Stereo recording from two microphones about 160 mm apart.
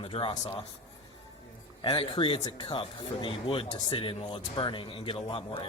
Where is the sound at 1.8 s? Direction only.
30° left (ahead or behind).